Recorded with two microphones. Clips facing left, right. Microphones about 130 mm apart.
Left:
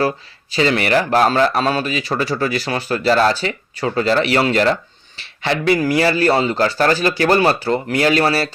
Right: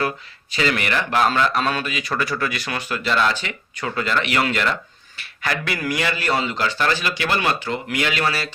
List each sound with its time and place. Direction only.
0.5 s speech: 35° left (ahead or behind)